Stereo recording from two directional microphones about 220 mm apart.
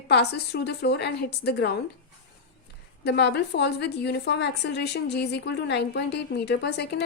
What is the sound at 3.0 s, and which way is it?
Speech, 50° left (ahead or behind).